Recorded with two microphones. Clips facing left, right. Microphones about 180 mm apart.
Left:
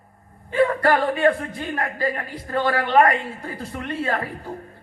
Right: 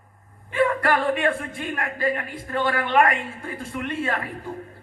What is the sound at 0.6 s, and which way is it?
Speech, 30° left (ahead or behind).